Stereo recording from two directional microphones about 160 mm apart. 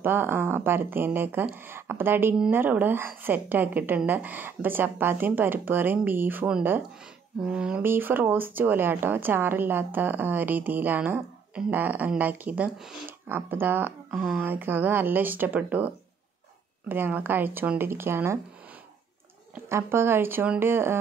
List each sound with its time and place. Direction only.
0.0 s speech: 15° right (ahead or behind)
16.9 s speech: 15° right (ahead or behind)
19.7 s speech: 15° right (ahead or behind)